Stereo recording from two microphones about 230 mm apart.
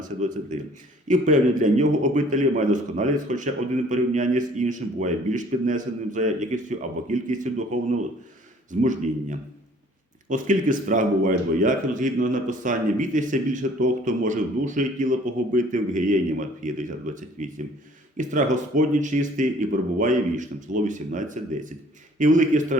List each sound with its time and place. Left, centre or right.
1.0 s a man's voice: right